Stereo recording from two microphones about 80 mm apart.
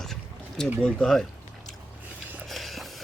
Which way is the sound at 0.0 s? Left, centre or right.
Centre.